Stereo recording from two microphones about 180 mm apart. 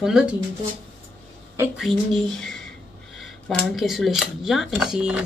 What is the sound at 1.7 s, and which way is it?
Speech, centre (ahead or behind).